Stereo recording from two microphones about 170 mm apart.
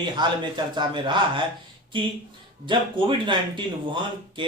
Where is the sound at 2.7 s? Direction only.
30° right (ahead or behind).